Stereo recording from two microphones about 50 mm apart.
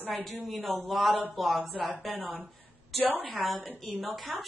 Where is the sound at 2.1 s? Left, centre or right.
Right.